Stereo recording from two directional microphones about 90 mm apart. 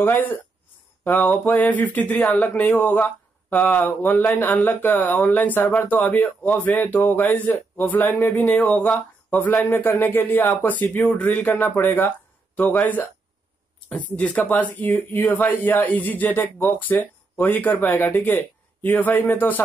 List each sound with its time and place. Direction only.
0.0 s speech: 20° left (ahead or behind)